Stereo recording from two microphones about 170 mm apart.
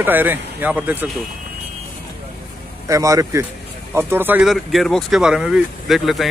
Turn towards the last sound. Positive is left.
turn(degrees=0)  # may be behind; listen again after turning